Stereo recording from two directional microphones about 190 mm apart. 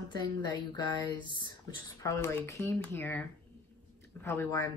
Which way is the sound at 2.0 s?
15° left (ahead or behind).